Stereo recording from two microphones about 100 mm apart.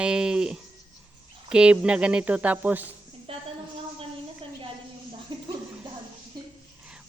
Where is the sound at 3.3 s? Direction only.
65° right (ahead or behind).